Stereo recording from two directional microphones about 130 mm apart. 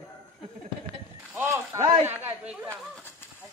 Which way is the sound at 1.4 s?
20° right (ahead or behind).